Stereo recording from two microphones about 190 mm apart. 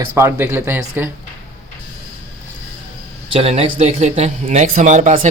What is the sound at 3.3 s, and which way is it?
A man's voice, 30° right (ahead or behind).